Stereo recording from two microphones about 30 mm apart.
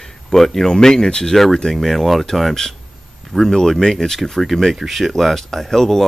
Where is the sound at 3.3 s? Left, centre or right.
Centre.